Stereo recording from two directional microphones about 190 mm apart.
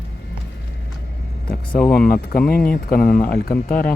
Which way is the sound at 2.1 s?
50° left (ahead or behind).